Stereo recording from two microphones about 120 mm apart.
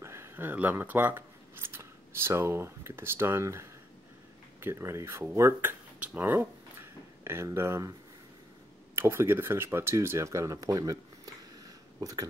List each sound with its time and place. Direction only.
0.0 s speech: 20° right (ahead or behind)
8.9 s speech: 20° right (ahead or behind)